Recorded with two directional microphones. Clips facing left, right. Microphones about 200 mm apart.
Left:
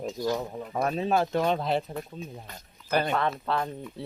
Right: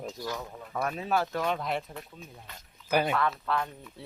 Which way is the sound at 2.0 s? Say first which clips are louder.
Left 8 dB; 40° left (ahead or behind).